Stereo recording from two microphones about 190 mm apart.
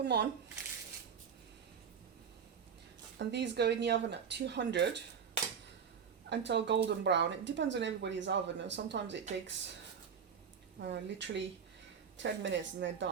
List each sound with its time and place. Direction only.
0.0 s speech: 65° right (ahead or behind)
3.2 s speech: 65° right (ahead or behind)
6.3 s speech: 65° right (ahead or behind)
10.8 s speech: 70° right (ahead or behind)